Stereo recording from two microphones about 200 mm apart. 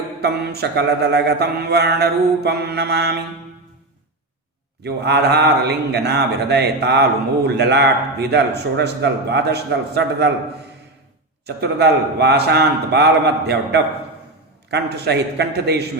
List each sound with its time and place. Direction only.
0.2 s speech: 55° right (ahead or behind)
4.8 s speech: 55° right (ahead or behind)
11.4 s speech: 55° right (ahead or behind)